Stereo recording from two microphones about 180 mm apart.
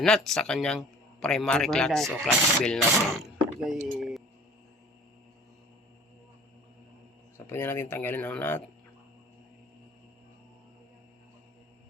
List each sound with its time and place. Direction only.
0.0 s a man's voice: 5° left (ahead or behind)
3.2 s a sound: centre (ahead or behind)
7.4 s speech: 15° left (ahead or behind)